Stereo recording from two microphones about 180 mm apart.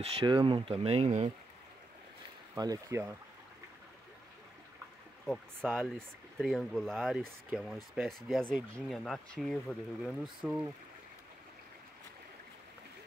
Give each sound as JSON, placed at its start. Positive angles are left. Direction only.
{"t": 0.0, "sound": "speech", "side_deg": -30}
{"t": 2.5, "sound": "speech", "side_deg": -20}
{"t": 5.2, "sound": "speech", "side_deg": 5}